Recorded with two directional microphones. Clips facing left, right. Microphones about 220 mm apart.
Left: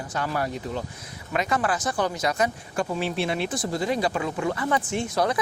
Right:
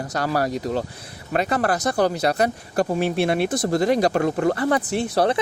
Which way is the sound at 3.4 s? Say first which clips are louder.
Right 6 dB; 40° right (ahead or behind).